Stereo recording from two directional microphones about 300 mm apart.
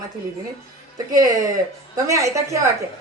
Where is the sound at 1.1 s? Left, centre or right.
Centre.